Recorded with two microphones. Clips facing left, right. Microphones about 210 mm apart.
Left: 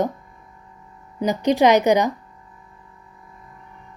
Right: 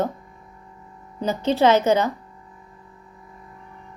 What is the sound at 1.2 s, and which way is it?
Speech, 15° left (ahead or behind).